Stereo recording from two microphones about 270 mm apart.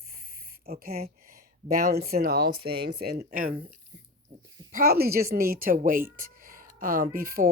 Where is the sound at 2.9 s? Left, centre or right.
Right.